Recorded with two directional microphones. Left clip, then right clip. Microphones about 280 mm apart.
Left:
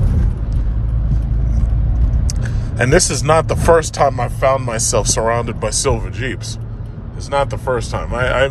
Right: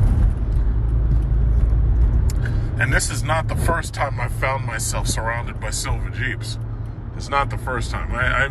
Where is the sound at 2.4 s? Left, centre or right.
Centre.